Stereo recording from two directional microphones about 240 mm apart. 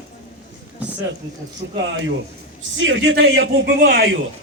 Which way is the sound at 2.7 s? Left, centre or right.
Right.